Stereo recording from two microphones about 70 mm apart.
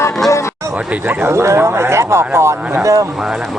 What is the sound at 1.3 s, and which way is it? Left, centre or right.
Speech, right.